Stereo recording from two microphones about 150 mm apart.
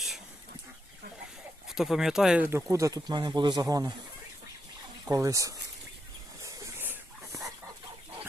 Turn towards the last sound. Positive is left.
turn(degrees=-15)  # may be behind; listen again after turning